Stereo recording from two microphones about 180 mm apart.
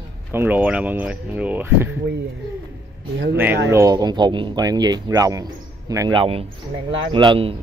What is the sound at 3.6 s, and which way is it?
Speech, 20° right (ahead or behind).